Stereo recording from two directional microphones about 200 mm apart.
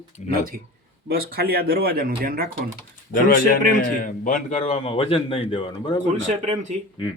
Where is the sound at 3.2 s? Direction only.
45° left (ahead or behind); by 6.0 s 25° left (ahead or behind).